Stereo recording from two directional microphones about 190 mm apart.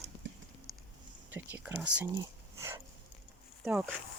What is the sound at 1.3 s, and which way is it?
Speech, 10° right (ahead or behind).